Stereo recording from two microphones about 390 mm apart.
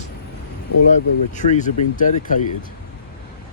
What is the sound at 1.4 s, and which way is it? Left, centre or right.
Speech, centre.